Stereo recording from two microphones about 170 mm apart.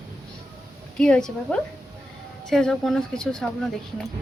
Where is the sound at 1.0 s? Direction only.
5° left (ahead or behind).